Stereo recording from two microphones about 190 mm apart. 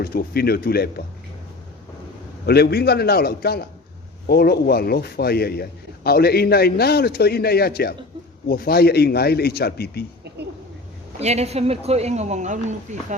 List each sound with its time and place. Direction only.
0.0 s a man's voice: 55° left (ahead or behind)
2.5 s a man's voice: 55° left (ahead or behind)
11.2 s speech: 35° right (ahead or behind)